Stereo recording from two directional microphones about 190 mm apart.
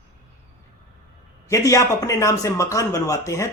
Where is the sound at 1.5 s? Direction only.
15° left (ahead or behind).